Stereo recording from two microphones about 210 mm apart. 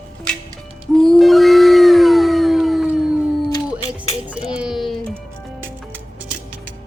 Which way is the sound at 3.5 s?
25° left (ahead or behind).